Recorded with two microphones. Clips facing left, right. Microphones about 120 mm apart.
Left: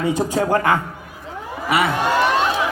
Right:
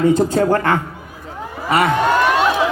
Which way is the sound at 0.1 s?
10° left (ahead or behind).